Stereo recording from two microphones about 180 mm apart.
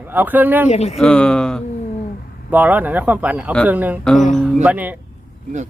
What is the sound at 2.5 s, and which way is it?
Speech, 10° right (ahead or behind).